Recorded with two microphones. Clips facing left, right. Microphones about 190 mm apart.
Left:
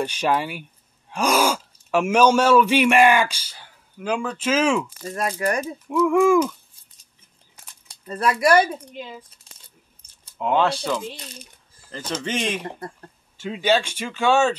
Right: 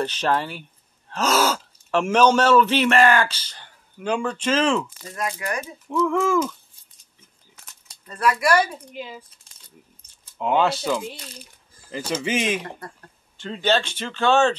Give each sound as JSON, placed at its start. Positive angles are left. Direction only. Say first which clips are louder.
{"t": 0.0, "sound": "speech", "louder": "left 1 dB", "side_deg": 10}
{"t": 5.1, "sound": "speech", "louder": "left 4 dB", "side_deg": 35}
{"t": 5.9, "sound": "speech", "louder": "left 4 dB", "side_deg": 10}
{"t": 8.1, "sound": "speech", "louder": "left 2 dB", "side_deg": 25}
{"t": 8.9, "sound": "speech", "louder": "right 1 dB", "side_deg": -5}
{"t": 10.3, "sound": "speech", "louder": "even", "side_deg": 0}
{"t": 12.6, "sound": "speech", "louder": "left 3 dB", "side_deg": 25}
{"t": 13.4, "sound": "speech", "louder": "left 1 dB", "side_deg": 10}